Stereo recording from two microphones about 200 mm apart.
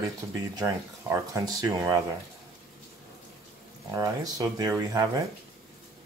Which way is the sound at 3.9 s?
15° right (ahead or behind).